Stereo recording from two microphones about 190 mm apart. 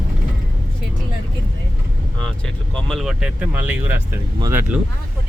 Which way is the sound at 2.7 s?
Centre (ahead or behind).